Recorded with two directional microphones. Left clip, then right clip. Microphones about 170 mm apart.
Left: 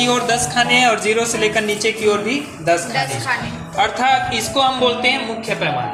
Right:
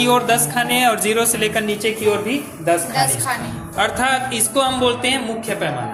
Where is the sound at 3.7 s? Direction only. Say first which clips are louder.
Left 2 dB; 20° right (ahead or behind).